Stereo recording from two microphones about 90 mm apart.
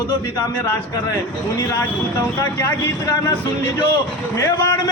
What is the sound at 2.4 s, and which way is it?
A man's voice, 35° left (ahead or behind).